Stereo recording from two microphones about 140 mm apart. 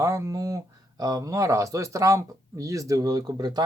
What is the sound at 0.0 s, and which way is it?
Speech, 20° right (ahead or behind).